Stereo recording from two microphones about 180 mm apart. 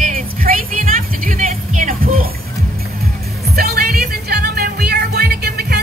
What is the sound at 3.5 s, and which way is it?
Music, 60° right (ahead or behind).